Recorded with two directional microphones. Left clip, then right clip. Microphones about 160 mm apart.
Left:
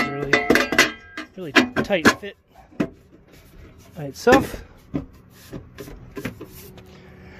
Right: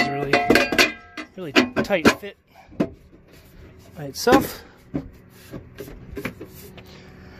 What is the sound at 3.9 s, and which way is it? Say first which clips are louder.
Speech: left 1 dB; 25° left (ahead or behind).